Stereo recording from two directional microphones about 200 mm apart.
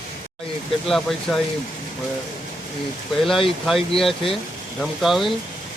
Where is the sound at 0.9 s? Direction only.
Centre (ahead or behind).